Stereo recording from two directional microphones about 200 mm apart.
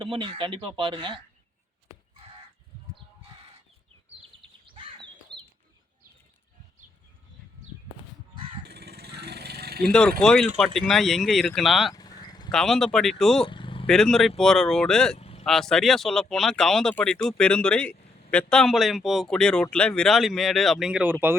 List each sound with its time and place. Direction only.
0.0 s speech: 25° right (ahead or behind)
4.6 s a sound: 25° right (ahead or behind)
5.3 s chicken: 25° right (ahead or behind)
8.7 s vehicle: 55° right (ahead or behind)
9.8 s speech: 5° left (ahead or behind)
11.9 s sheep: 20° left (ahead or behind)
12.5 s speech: centre (ahead or behind)
13.4 s vehicle: 25° left (ahead or behind)
13.8 s speech: 5° left (ahead or behind)
15.1 s vehicle: 30° left (ahead or behind)
15.4 s speech: centre (ahead or behind)